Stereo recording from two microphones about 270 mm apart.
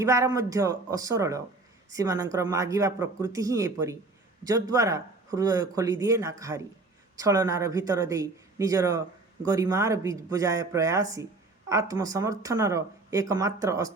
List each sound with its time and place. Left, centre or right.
0.0 s speech: centre